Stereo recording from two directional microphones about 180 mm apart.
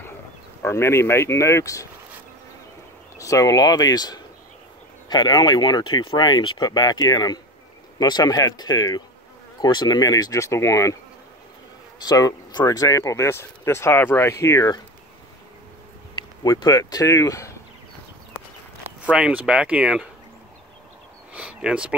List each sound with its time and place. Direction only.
0.6 s speech: 15° left (ahead or behind)
3.2 s speech: 20° left (ahead or behind)
12.0 s speech: 20° left (ahead or behind)
16.4 s speech: 20° left (ahead or behind)
19.0 s speech: 5° right (ahead or behind)
21.3 s speech: 5° right (ahead or behind)